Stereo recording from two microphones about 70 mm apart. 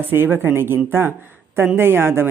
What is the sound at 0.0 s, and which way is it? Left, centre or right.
Speech, right.